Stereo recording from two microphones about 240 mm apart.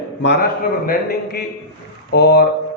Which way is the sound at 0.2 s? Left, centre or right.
Left.